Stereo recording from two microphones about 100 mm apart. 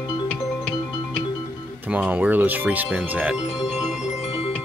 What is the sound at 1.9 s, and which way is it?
Speech, 15° right (ahead or behind).